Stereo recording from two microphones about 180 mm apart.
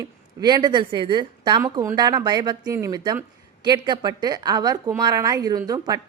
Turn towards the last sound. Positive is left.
turn(degrees=-20)  # may be behind; listen again after turning